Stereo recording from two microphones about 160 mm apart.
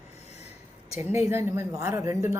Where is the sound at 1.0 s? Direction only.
15° right (ahead or behind).